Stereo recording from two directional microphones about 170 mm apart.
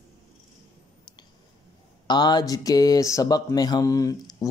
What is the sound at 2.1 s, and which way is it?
Speech, 25° left (ahead or behind).